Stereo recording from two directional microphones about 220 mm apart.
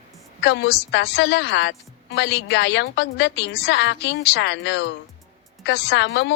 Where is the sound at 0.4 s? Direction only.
50° left (ahead or behind).